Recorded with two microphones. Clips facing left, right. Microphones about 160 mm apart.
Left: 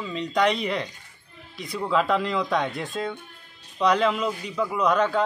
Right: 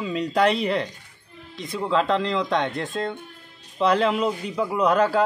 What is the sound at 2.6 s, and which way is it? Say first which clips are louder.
Music: right 2 dB; centre (ahead or behind).